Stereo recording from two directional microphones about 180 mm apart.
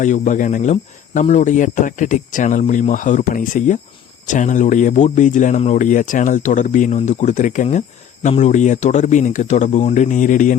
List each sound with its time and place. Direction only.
0.0 s speech: 45° left (ahead or behind)